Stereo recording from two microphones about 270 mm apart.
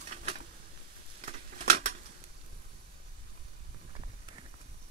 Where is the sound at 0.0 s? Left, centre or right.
Right.